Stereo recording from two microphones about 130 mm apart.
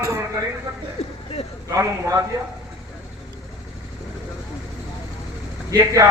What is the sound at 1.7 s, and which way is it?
Speech, 25° right (ahead or behind).